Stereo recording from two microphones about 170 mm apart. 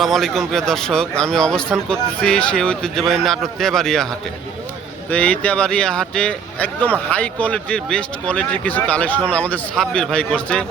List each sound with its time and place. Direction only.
0.0 s speech: centre (ahead or behind)
5.1 s speech: 10° left (ahead or behind)